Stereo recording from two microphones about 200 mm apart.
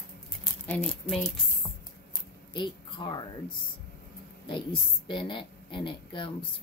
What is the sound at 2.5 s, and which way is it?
A woman's voice, 25° left (ahead or behind).